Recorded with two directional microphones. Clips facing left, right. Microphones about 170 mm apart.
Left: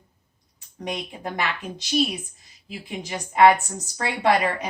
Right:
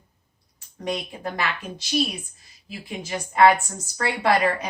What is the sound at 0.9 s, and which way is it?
Speech, 20° left (ahead or behind).